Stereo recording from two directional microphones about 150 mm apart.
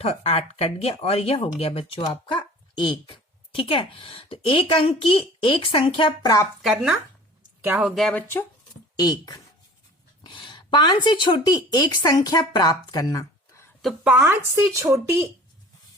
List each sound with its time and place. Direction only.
0.0 s speech: 45° left (ahead or behind); by 6.5 s 25° left (ahead or behind)
6.6 s speech: centre (ahead or behind)
7.6 s speech: 10° right (ahead or behind)
7.9 s speech: centre (ahead or behind)
9.0 s speech: 25° left (ahead or behind)
13.8 s speech: 5° right (ahead or behind)